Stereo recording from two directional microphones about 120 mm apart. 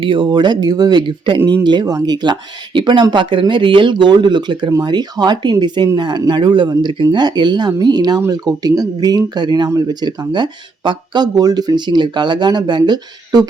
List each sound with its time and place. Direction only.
0.0 s speech: 45° right (ahead or behind)